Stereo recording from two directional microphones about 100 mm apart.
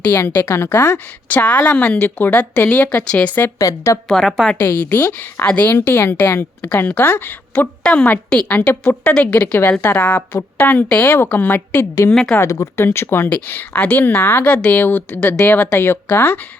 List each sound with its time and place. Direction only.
0.0 s a woman's voice: 20° left (ahead or behind)
1.3 s a woman's voice: 15° left (ahead or behind)
3.6 s a woman's voice: 35° left (ahead or behind)
4.1 s a woman's voice: centre (ahead or behind)
4.6 s a woman's voice: 15° left (ahead or behind)
12.1 s a woman's voice: 5° left (ahead or behind)
12.4 s a woman's voice: 30° left (ahead or behind)